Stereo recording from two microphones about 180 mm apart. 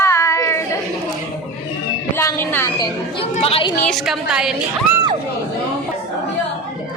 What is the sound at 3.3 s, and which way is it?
Chatter, 35° left (ahead or behind).